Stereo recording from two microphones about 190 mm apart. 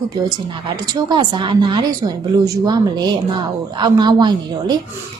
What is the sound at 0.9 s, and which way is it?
Speech, 20° right (ahead or behind).